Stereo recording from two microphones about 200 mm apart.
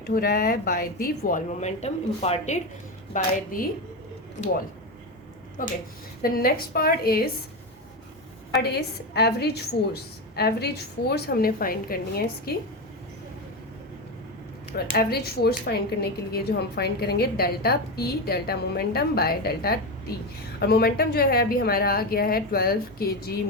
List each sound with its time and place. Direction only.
0.1 s a woman's voice: 45° left (ahead or behind)
3.1 s a woman's voice: 45° left (ahead or behind)
5.6 s a woman's voice: 45° left (ahead or behind)
8.6 s a woman's voice: 55° left (ahead or behind)
14.9 s a woman's voice: 50° left (ahead or behind)